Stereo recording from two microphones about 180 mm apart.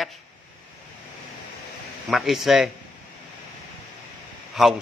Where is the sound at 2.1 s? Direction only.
Centre (ahead or behind).